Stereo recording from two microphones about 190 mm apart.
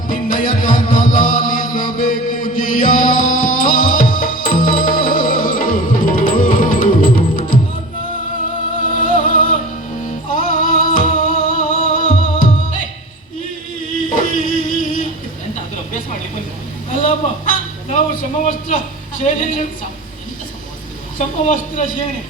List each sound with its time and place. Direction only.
0.1 s music: 45° left (ahead or behind)
9.0 s music: 45° left (ahead or behind)
14.1 s a sound: 45° left (ahead or behind)
16.9 s vehicle: 45° left (ahead or behind)
17.9 s a man's voice: 40° left (ahead or behind)
21.2 s speech: 45° left (ahead or behind)